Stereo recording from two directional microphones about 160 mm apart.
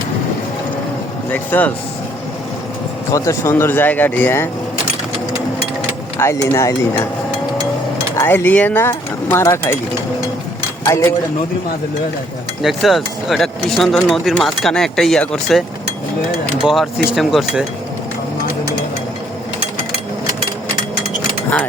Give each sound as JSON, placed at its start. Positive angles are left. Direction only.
{"t": 1.3, "sound": "speech", "side_deg": 10}
{"t": 3.1, "sound": "speech", "side_deg": 20}
{"t": 6.5, "sound": "speech", "side_deg": 20}
{"t": 8.1, "sound": "speech", "side_deg": 15}
{"t": 10.8, "sound": "speech", "side_deg": 15}
{"t": 12.6, "sound": "speech", "side_deg": 0}